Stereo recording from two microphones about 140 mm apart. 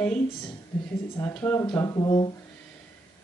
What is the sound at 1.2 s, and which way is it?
Speech, 15° left (ahead or behind).